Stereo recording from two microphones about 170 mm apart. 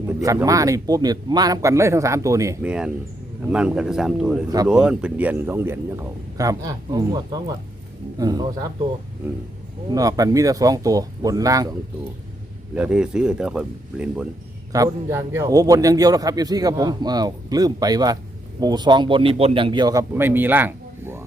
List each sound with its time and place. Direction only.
0.4 s a man's voice: 20° right (ahead or behind)
2.6 s speech: 5° right (ahead or behind)
4.4 s a man's voice: 20° right (ahead or behind)
4.7 s a man's voice: 5° right (ahead or behind); by 8.7 s 20° right (ahead or behind)
9.9 s a man's voice: 20° right (ahead or behind)
12.7 s speech: 5° right (ahead or behind)
14.7 s a man's voice: 20° right (ahead or behind)